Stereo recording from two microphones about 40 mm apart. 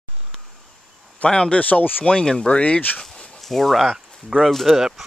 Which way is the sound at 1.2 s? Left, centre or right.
Left.